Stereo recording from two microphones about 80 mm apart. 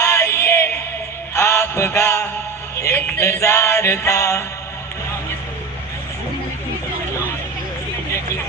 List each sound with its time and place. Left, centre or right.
0.0 s music: left